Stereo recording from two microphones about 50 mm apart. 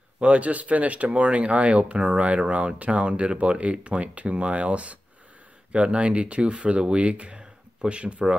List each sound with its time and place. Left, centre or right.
0.2 s speech: right